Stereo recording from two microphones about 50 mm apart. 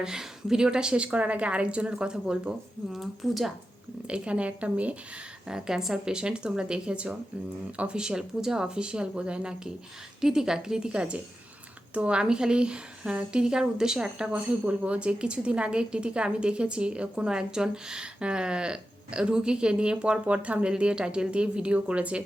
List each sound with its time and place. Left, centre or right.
0.0 s a woman's voice: centre
2.9 s speech: centre
4.0 s a woman's voice: right
5.5 s a woman's voice: centre
14.3 s a woman's voice: right